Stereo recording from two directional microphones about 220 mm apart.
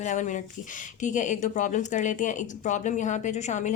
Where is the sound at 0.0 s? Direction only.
35° left (ahead or behind).